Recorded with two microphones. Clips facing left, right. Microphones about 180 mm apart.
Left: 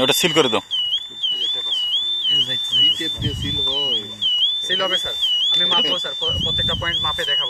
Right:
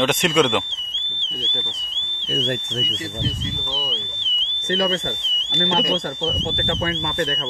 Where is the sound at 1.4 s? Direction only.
65° right (ahead or behind).